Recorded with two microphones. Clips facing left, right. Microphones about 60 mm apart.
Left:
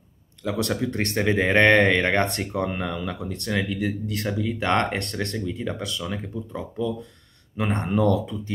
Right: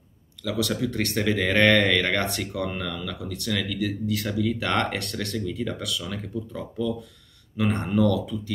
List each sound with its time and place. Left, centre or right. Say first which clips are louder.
0.4 s speech: left 1 dB; left